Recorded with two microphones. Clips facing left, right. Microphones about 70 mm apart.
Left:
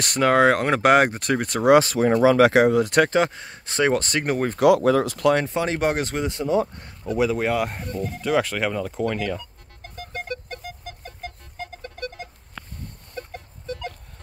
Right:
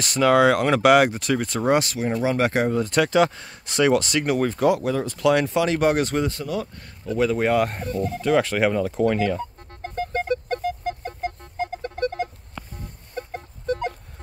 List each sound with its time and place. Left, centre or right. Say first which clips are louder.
0.0 s speech: right 1 dB; left
0.3 s speech: right 1 dB; left
2.4 s speech: left 5 dB; left
3.2 s speech: right 2 dB; left
4.6 s speech: left 4 dB; left
5.3 s speech: right 2 dB; left
7.1 s speech: right 1 dB; centre
9.4 s music: right 11 dB; right
13.7 s a sound: right 7 dB; right